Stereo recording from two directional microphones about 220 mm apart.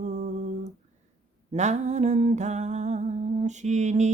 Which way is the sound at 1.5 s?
30° right (ahead or behind).